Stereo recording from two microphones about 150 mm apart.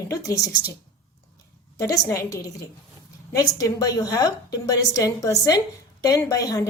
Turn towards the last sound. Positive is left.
turn(degrees=25)  # may be behind; listen again after turning